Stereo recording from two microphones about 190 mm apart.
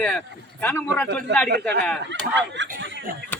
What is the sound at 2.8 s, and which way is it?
Snicker, 80° right.